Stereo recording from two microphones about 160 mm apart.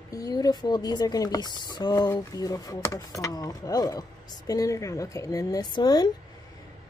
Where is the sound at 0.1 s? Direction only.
20° left (ahead or behind).